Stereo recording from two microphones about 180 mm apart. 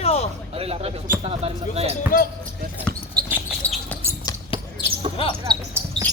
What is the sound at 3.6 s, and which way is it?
Basketball bounce, 5° left (ahead or behind).